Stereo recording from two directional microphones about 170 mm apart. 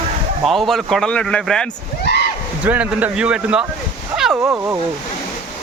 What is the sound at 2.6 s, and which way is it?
Speech, 10° right (ahead or behind).